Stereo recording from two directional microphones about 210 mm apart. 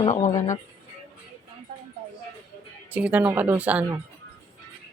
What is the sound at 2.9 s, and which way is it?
Speech, 5° right (ahead or behind).